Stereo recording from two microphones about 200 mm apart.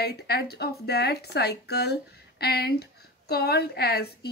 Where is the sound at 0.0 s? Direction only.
55° left (ahead or behind).